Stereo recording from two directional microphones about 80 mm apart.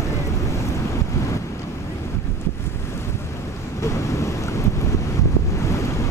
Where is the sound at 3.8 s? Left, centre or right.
Left.